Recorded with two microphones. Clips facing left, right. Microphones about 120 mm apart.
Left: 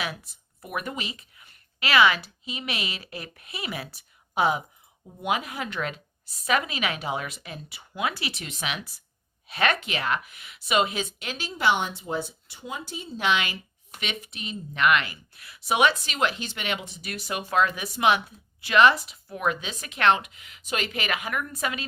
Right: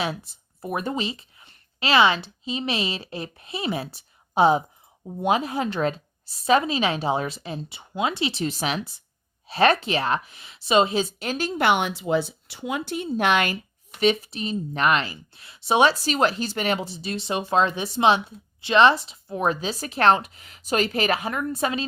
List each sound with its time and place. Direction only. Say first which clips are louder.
0.6 s a woman's voice: right 6 dB; 30° right (ahead or behind); by 13.6 s 50° right (ahead or behind)
14.0 s speech: right 13 dB; 35° right (ahead or behind)